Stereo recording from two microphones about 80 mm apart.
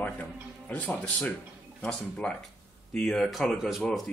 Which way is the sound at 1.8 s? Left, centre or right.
Centre.